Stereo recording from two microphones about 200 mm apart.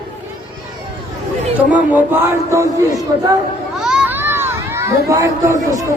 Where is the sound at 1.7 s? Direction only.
5° right (ahead or behind).